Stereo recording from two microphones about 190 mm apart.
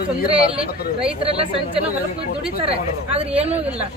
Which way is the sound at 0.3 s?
30° right (ahead or behind).